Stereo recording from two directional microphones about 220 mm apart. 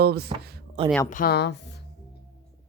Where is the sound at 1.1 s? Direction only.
40° left (ahead or behind).